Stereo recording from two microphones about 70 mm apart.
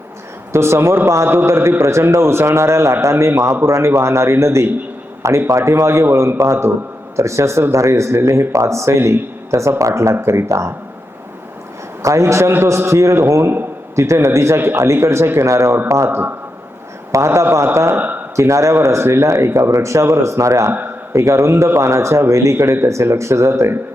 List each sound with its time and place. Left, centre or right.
0.5 s a man's voice: right
9.5 s a man's voice: right
12.0 s a man's voice: right
16.0 s a man's voice: right
17.1 s a man's voice: right
17.9 s a sound: right
18.3 s a man's voice: right